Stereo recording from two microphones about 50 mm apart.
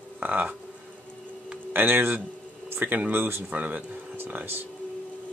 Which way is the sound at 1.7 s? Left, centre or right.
Right.